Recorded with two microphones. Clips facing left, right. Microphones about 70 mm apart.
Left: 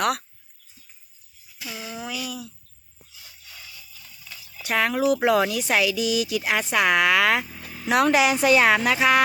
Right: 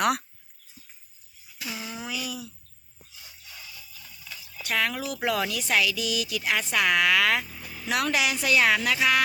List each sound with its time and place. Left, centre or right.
0.0 s speech: centre
1.6 s speech: centre
4.6 s speech: left